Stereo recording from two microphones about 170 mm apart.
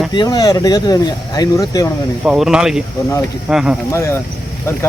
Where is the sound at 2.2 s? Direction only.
5° right (ahead or behind).